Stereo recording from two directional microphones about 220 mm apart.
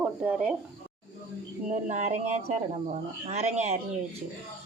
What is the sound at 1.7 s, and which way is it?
Speech, 35° right (ahead or behind).